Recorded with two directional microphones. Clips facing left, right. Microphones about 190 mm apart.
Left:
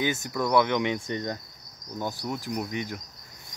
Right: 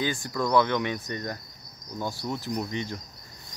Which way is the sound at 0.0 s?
20° left (ahead or behind).